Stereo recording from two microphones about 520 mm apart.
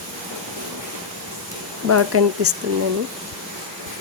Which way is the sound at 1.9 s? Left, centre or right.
Right.